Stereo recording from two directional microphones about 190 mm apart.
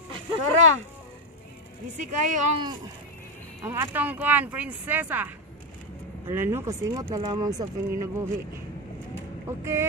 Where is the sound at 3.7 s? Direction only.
10° right (ahead or behind).